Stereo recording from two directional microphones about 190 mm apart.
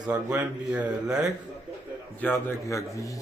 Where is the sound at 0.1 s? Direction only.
5° right (ahead or behind).